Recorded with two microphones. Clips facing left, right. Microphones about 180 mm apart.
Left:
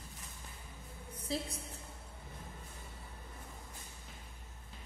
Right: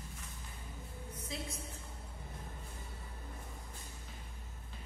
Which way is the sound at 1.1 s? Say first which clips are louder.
Left 6 dB; 30° left (ahead or behind).